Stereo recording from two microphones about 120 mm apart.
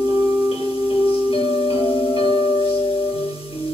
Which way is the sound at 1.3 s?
50° left (ahead or behind).